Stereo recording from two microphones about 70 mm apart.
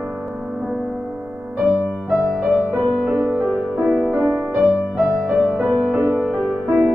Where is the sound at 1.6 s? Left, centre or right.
Centre.